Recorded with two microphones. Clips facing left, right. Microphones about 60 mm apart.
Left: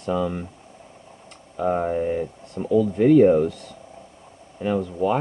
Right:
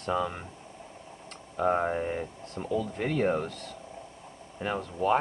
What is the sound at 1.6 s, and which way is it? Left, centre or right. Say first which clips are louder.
Speech: left 4 dB; centre.